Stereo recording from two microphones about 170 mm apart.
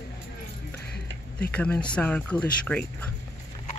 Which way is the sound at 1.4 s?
5° left (ahead or behind).